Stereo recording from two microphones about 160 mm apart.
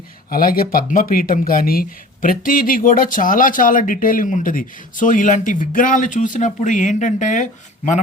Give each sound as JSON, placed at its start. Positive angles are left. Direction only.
{"t": 0.3, "sound": "speech", "side_deg": 65}